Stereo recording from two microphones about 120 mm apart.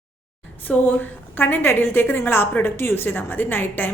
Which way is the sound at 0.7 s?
15° left (ahead or behind).